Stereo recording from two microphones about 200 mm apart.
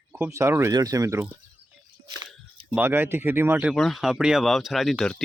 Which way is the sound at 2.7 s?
10° right (ahead or behind).